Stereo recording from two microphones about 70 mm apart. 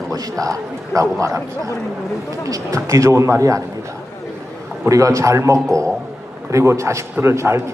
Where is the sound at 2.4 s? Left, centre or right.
Right.